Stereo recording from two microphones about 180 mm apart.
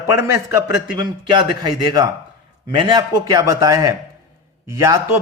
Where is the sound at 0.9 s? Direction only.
25° right (ahead or behind).